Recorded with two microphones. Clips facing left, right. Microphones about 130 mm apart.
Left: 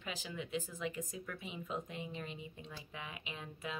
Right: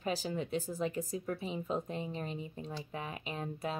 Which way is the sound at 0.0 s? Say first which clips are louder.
Right 9 dB; 40° right (ahead or behind).